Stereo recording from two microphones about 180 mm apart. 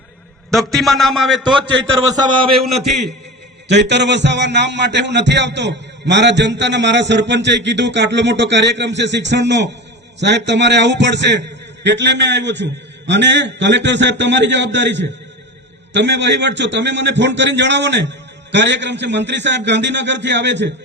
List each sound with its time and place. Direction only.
0.5 s a man's voice: centre (ahead or behind)
2.1 s a man's voice: 25° right (ahead or behind)
2.6 s a man's voice: centre (ahead or behind)
3.7 s a man's voice: 75° right (ahead or behind)